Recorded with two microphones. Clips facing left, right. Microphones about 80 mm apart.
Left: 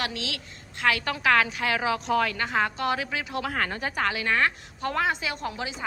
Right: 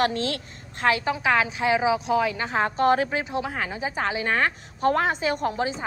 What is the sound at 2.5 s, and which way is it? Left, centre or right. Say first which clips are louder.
A woman's voice: right 5 dB; right.